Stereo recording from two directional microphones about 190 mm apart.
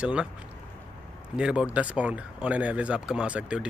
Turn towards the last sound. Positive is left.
turn(degrees=-5)  # may be behind; listen again after turning